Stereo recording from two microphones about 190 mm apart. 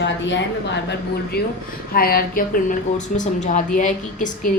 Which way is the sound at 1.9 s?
50° left (ahead or behind).